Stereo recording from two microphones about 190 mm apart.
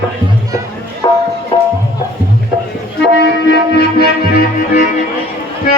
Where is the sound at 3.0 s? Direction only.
65° left (ahead or behind); by 5.1 s 45° left (ahead or behind).